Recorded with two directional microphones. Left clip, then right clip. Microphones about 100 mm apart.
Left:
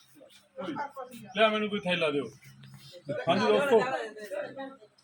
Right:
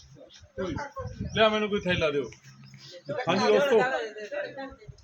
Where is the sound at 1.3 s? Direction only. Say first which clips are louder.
Right 2 dB; 50° right (ahead or behind).